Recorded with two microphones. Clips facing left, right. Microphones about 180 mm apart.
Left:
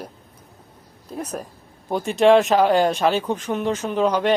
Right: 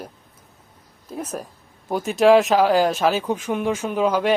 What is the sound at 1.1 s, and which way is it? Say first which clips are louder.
Speech: even; centre (ahead or behind).